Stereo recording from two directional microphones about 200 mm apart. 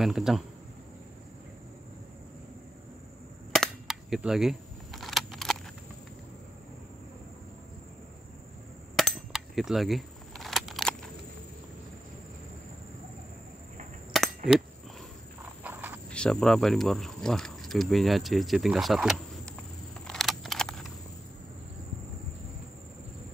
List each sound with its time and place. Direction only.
0.0 s speech: centre (ahead or behind)
3.5 s cap gun: centre (ahead or behind)
8.9 s cap gun: centre (ahead or behind)
14.1 s a sound: centre (ahead or behind)
15.6 s cricket: 10° right (ahead or behind)
16.1 s speech: 5° left (ahead or behind)
20.1 s a sound: centre (ahead or behind)